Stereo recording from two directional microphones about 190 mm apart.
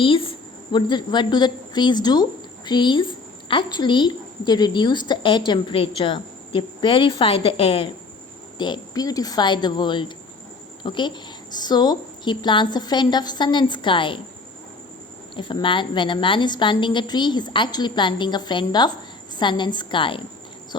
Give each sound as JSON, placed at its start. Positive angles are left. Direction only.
{"t": 0.0, "sound": "a woman's voice", "side_deg": 30}
{"t": 15.4, "sound": "a woman's voice", "side_deg": 25}